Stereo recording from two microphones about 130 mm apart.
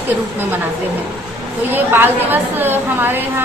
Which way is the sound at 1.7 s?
15° right (ahead or behind).